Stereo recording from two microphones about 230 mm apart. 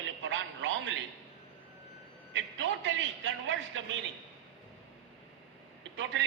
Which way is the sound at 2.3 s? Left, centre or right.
Right.